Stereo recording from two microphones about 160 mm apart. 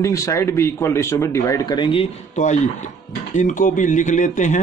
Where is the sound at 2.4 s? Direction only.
50° left (ahead or behind).